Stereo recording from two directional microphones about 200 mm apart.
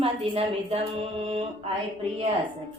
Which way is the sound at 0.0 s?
30° right (ahead or behind).